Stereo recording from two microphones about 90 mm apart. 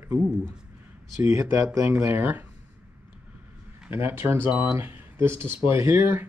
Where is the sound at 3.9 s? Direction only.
30° right (ahead or behind).